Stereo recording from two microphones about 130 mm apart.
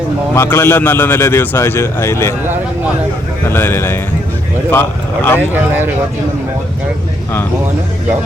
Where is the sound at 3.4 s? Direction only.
20° left (ahead or behind).